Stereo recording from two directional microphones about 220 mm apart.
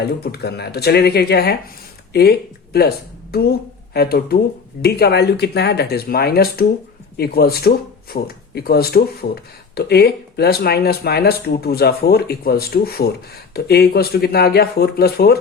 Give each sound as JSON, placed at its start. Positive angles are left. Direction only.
{"t": 0.0, "sound": "speech", "side_deg": 50}
{"t": 2.7, "sound": "speech", "side_deg": 45}